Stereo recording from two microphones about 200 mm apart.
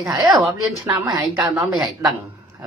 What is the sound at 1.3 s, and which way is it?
Speech, centre (ahead or behind).